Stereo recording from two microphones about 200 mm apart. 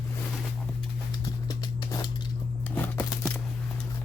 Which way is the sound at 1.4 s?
20° left (ahead or behind).